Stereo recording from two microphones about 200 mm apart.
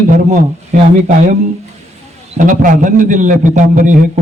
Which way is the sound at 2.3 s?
40° right (ahead or behind).